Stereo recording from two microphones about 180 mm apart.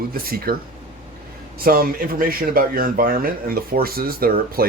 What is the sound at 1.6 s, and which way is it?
A man's voice, 55° right (ahead or behind).